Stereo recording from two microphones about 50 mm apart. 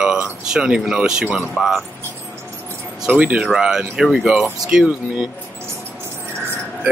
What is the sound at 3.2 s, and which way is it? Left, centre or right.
Speech, right.